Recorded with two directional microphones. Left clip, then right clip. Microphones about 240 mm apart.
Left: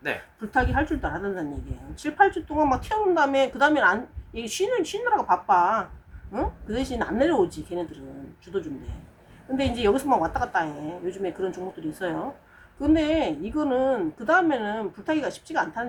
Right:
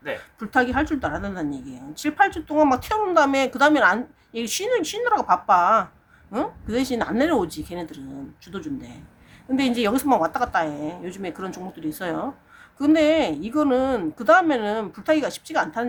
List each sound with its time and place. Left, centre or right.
0.5 s speech: right
9.6 s speech: right